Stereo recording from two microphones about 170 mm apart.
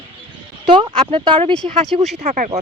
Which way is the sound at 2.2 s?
45° right (ahead or behind).